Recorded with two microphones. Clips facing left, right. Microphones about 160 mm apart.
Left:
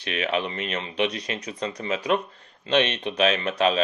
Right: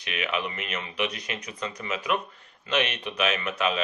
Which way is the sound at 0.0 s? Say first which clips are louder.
Left 4 dB; 35° left (ahead or behind).